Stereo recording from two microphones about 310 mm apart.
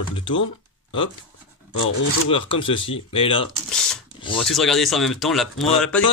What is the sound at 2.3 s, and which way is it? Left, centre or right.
Speech, centre.